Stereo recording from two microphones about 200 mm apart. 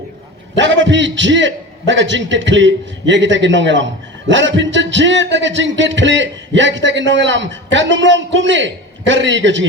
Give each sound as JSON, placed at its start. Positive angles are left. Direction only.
{"t": 0.5, "sound": "a man's voice", "side_deg": -65}